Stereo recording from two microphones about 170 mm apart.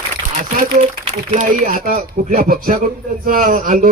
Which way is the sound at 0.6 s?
50° right (ahead or behind).